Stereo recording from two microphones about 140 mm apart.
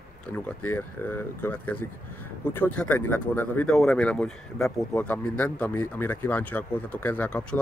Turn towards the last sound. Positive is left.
turn(degrees=10)  # may be behind; listen again after turning